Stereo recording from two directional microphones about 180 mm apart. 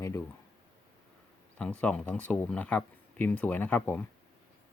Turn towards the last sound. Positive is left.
turn(degrees=10)  # may be behind; listen again after turning